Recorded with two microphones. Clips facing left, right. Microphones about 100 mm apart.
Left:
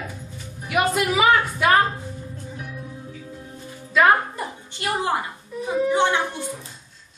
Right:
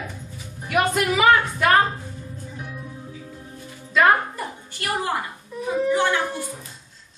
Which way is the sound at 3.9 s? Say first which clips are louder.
Left 1 dB; 5° left (ahead or behind).